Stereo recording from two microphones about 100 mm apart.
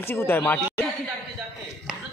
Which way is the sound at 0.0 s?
25° left (ahead or behind).